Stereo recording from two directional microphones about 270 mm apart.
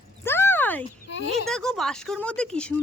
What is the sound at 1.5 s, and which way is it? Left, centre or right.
A woman's voice, centre.